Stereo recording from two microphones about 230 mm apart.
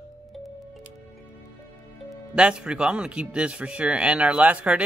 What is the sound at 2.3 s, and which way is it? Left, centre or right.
Speech, centre.